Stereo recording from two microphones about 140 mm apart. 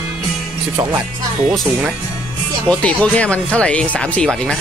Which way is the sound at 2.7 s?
10° left (ahead or behind).